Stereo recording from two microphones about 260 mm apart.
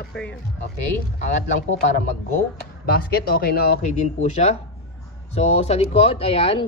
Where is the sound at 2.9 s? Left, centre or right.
Left.